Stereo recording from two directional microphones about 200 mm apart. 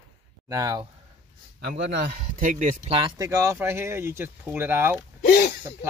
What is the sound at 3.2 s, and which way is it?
Speech, 15° right (ahead or behind).